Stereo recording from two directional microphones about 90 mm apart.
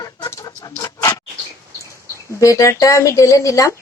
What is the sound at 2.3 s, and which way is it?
Speech, 35° left (ahead or behind).